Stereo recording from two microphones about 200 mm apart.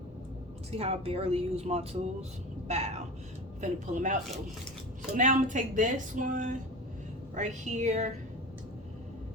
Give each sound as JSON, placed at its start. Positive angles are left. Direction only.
{"t": 0.7, "sound": "speech", "side_deg": -30}